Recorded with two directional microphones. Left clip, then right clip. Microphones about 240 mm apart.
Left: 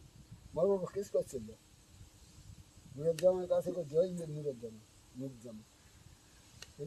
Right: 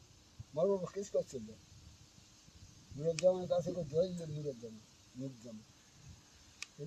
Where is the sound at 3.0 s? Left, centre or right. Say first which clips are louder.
Left 2 dB; centre.